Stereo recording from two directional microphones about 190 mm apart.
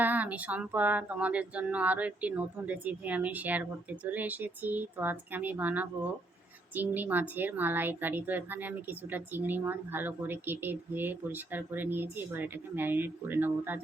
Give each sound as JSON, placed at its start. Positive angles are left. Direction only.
{"t": 0.0, "sound": "a woman's voice", "side_deg": -10}